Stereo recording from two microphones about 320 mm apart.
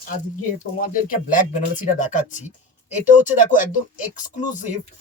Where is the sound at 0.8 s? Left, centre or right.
Left.